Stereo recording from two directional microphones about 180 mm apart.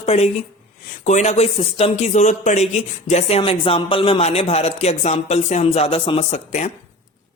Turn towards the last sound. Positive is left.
turn(degrees=40)  # may be behind; listen again after turning